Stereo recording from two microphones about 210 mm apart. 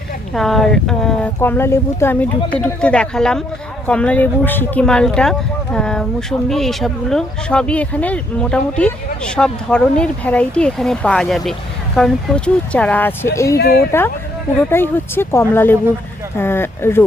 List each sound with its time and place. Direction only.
0.3 s speech: centre (ahead or behind)
13.6 s speech: 45° left (ahead or behind)
14.7 s speech: 10° left (ahead or behind)